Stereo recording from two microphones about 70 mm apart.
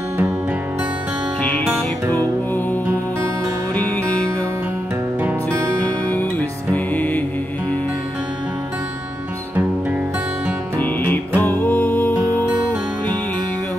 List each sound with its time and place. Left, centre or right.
6.7 s music: left
10.8 s music: left